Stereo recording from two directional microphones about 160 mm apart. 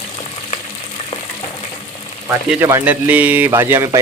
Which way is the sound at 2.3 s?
15° right (ahead or behind).